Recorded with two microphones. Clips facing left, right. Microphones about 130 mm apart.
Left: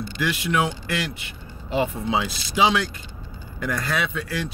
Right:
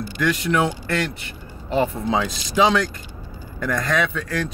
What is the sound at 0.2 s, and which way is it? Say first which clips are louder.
Speech: right 3 dB; 10° left (ahead or behind).